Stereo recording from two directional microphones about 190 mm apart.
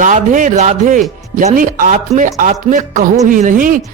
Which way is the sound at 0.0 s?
40° right (ahead or behind).